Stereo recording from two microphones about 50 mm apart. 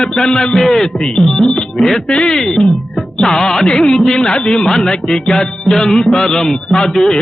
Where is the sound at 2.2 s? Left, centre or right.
Centre.